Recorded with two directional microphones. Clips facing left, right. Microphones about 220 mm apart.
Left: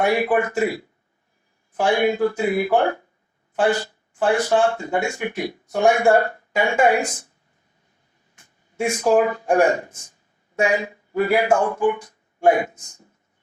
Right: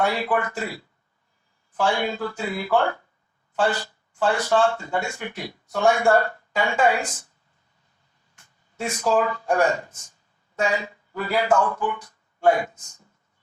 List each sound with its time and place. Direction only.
0.0 s speech: 15° left (ahead or behind)
8.4 s speech: 15° left (ahead or behind)